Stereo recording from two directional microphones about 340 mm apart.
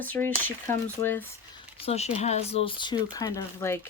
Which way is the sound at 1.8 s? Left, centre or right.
Centre.